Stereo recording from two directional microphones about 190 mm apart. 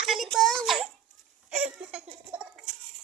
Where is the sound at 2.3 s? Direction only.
5° right (ahead or behind).